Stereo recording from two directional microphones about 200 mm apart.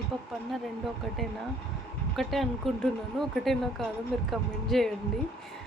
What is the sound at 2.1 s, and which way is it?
Speech, centre (ahead or behind).